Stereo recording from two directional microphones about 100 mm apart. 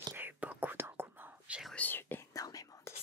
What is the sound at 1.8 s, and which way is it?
Whispering, 20° left (ahead or behind).